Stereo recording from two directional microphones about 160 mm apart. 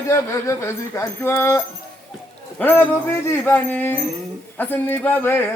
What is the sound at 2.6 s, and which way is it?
Speech, 10° left (ahead or behind).